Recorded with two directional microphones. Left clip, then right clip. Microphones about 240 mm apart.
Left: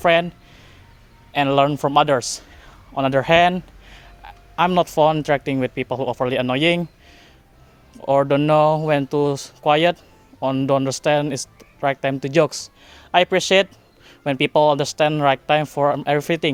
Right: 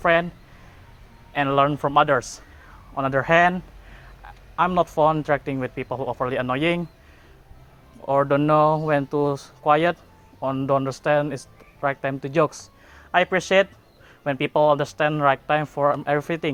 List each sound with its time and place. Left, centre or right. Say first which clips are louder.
0.0 s speech: left 3 dB; left
1.3 s a man's voice: left 3 dB; left
8.0 s speech: left 3 dB; left